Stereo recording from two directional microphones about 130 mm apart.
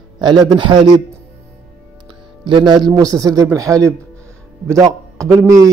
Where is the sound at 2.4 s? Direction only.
40° right (ahead or behind).